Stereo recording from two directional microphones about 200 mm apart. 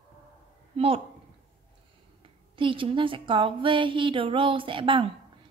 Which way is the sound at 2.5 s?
25° right (ahead or behind).